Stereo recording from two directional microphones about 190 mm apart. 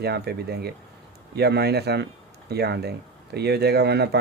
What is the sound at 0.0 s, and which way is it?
A man's voice, 60° right (ahead or behind).